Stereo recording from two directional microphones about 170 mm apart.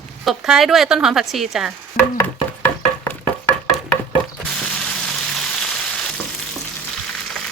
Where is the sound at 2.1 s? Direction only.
10° left (ahead or behind).